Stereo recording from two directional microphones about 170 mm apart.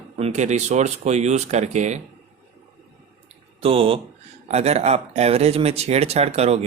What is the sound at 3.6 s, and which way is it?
Speech, 35° right (ahead or behind).